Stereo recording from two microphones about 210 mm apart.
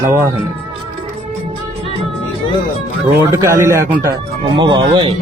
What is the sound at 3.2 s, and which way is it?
Speech, 15° right (ahead or behind).